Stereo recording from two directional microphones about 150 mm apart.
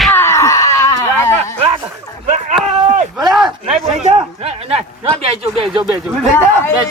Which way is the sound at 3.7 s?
45° right (ahead or behind).